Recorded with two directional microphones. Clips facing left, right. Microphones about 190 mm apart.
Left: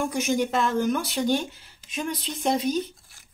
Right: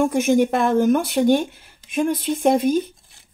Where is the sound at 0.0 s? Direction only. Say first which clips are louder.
Right 8 dB; 55° right (ahead or behind).